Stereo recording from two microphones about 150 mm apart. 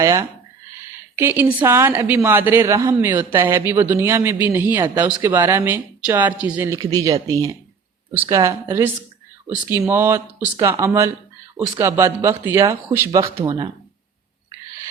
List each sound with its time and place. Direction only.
0.0 s a woman's voice: 20° right (ahead or behind)
6.7 s speech: 25° right (ahead or behind)